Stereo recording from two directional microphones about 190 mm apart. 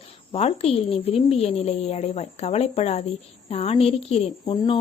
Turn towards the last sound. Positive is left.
turn(degrees=25)  # may be behind; listen again after turning